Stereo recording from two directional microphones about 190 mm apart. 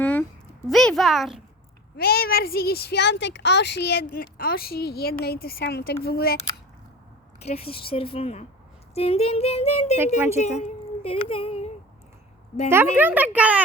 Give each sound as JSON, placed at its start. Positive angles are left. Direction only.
{"t": 0.0, "sound": "a sound", "side_deg": 10}
{"t": 0.7, "sound": "a child's voice", "side_deg": 0}
{"t": 2.0, "sound": "speech", "side_deg": 55}
{"t": 7.3, "sound": "speech", "side_deg": 35}
{"t": 10.4, "sound": "child singing", "side_deg": 35}
{"t": 12.7, "sound": "a child's voice", "side_deg": -10}